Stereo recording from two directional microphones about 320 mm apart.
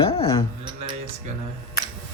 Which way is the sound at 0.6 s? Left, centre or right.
Centre.